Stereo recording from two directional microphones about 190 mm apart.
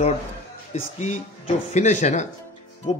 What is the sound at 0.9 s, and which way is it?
Speech, 40° left (ahead or behind).